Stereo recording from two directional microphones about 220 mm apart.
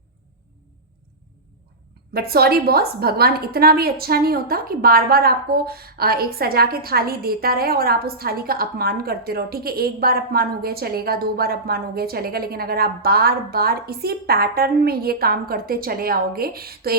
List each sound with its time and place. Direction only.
2.1 s a woman's voice: 45° right (ahead or behind)